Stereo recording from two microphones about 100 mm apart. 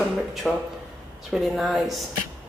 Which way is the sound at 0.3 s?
5° right (ahead or behind).